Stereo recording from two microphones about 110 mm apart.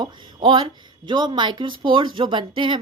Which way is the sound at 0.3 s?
50° right (ahead or behind).